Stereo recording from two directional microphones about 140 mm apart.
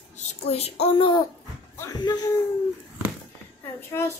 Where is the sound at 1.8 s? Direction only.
25° left (ahead or behind).